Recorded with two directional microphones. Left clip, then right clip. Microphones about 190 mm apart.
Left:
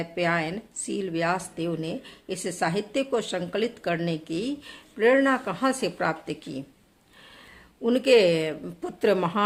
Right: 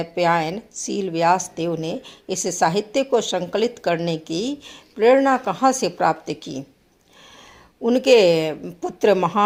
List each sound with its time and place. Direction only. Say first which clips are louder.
0.0 s a woman's voice: right 7 dB; 25° right (ahead or behind)
7.8 s a woman's voice: right 5 dB; 20° right (ahead or behind)